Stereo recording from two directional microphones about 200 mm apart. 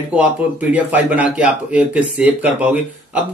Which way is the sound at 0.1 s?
5° right (ahead or behind).